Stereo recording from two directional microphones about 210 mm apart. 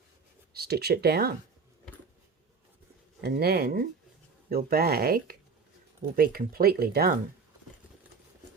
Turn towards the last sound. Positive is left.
turn(degrees=-45)  # may be behind; listen again after turning